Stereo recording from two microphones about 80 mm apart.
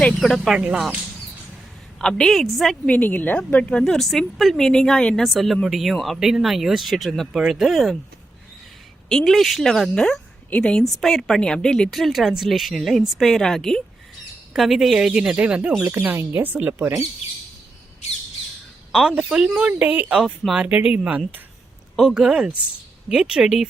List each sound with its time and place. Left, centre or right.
0.2 s speech: centre
2.0 s speech: centre
2.8 s a woman's voice: centre
9.0 s a woman's voice: centre
16.0 s speech: right
18.9 s speech: centre
19.8 s speech: right; by 20.7 s centre
20.7 s speech: centre